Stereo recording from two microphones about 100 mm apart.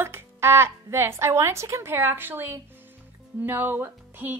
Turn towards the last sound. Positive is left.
turn(degrees=-20)  # may be behind; listen again after turning